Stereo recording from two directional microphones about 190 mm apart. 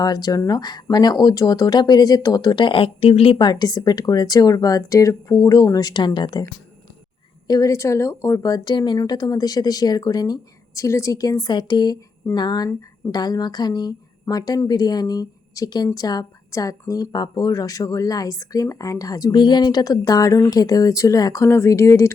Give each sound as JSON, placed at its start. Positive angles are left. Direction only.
{"t": 0.0, "sound": "speech", "side_deg": 20}
{"t": 7.4, "sound": "speech", "side_deg": 20}